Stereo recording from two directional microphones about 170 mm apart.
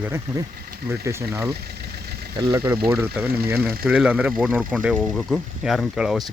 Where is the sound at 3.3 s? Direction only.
65° right (ahead or behind).